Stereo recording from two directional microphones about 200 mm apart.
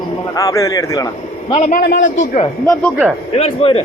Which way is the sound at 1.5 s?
40° left (ahead or behind).